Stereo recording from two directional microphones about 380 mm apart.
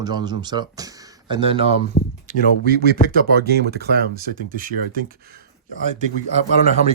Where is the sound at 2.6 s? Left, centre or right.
Right.